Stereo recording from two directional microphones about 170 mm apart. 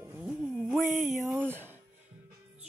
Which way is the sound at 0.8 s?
50° right (ahead or behind).